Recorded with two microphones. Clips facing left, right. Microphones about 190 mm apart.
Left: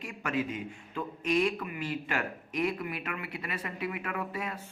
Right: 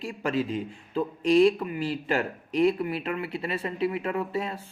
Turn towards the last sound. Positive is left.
turn(degrees=-30)  # may be behind; listen again after turning